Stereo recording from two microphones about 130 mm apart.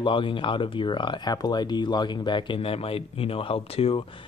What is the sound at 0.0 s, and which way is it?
Speech, 40° left (ahead or behind).